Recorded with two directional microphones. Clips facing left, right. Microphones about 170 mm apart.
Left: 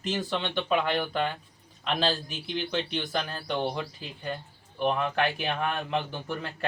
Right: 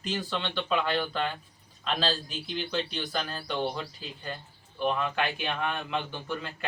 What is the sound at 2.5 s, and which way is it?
Speech, 20° left (ahead or behind).